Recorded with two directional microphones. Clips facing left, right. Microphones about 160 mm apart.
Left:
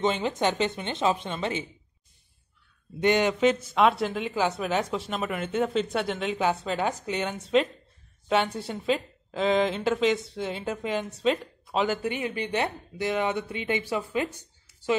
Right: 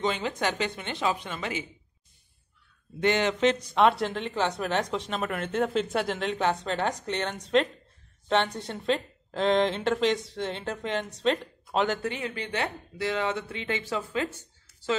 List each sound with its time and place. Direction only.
0.0 s speech: 20° left (ahead or behind)
3.0 s a woman's voice: 15° left (ahead or behind)